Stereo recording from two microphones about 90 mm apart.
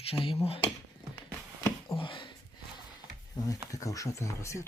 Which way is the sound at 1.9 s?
75° left (ahead or behind).